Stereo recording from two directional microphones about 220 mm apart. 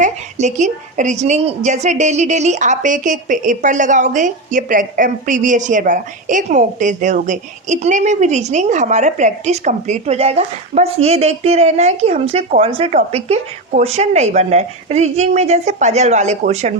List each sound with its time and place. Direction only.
0.0 s a woman's voice: 30° right (ahead or behind)